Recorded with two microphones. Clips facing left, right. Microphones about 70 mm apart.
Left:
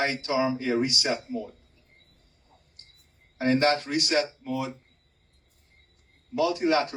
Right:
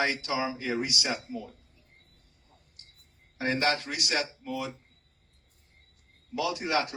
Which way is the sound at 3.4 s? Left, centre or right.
Left.